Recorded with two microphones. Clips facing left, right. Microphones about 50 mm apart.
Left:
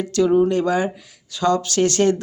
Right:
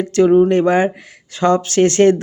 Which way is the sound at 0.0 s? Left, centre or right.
Right.